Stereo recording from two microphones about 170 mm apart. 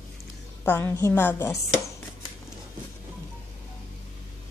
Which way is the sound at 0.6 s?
10° left (ahead or behind).